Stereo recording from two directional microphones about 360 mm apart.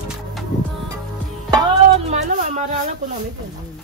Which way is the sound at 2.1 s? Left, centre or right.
Centre.